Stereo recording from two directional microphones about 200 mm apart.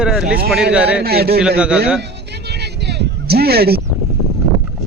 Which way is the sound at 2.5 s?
55° right (ahead or behind).